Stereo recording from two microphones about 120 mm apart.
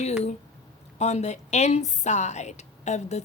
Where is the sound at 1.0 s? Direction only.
70° left (ahead or behind).